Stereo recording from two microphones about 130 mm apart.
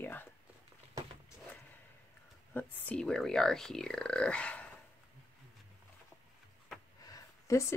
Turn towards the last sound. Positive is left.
turn(degrees=25)  # may be behind; listen again after turning